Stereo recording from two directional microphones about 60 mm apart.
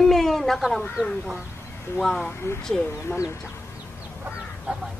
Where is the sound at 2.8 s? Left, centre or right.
Left.